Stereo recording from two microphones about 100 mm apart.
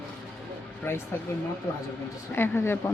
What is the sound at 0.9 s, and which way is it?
Speech, 25° left (ahead or behind).